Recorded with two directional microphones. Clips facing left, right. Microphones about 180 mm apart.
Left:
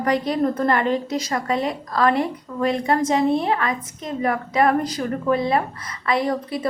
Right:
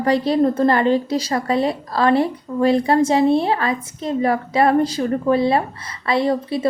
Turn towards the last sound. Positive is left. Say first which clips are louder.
# right 4 dB
turn(degrees=-30)  # may be behind; listen again after turning